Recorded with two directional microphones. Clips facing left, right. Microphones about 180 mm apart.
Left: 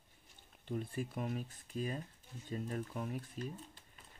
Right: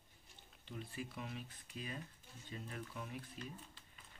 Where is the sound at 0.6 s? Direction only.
50° left (ahead or behind).